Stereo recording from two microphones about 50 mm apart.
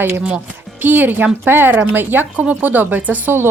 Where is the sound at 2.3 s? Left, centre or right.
Right.